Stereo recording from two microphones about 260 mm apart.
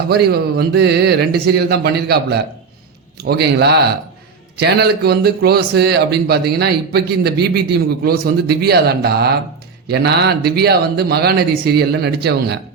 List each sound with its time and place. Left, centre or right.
0.1 s speech: right